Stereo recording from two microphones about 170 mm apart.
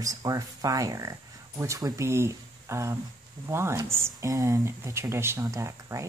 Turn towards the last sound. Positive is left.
turn(degrees=-15)  # may be behind; listen again after turning